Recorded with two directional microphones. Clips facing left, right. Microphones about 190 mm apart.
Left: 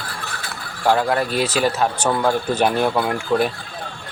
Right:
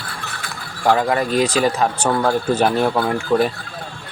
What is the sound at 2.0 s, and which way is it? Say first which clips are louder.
Speech: right 1 dB; 5° right (ahead or behind).